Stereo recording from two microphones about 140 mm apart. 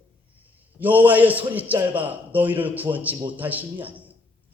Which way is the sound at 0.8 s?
10° right (ahead or behind).